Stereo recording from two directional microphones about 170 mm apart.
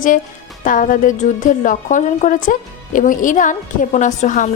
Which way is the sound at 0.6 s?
50° left (ahead or behind).